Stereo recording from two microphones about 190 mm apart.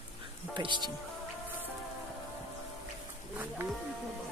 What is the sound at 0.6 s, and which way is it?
Speech, 25° right (ahead or behind).